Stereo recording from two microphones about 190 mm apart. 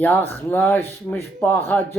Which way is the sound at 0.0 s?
10° left (ahead or behind).